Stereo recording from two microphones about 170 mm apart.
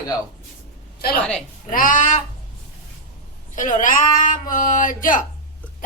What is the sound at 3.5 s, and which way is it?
Speech, 50° left (ahead or behind).